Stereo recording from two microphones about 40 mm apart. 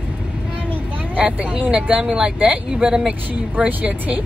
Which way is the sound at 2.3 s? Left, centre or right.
Right.